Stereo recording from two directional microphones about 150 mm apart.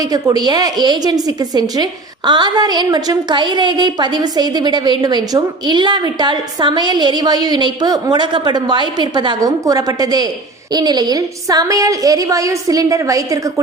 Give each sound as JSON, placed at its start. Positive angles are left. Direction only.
{"t": 0.0, "sound": "a woman's voice", "side_deg": -25}